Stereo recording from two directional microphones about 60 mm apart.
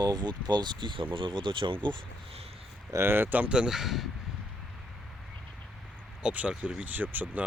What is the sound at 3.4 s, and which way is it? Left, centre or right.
Speech, centre.